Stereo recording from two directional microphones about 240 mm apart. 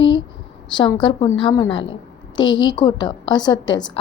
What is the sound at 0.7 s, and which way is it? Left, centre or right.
A woman's voice, centre.